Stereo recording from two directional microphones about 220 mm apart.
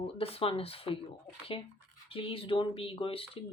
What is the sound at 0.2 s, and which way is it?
Speech, 25° left (ahead or behind).